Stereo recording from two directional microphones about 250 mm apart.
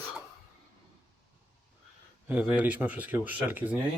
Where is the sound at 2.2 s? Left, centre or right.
Centre.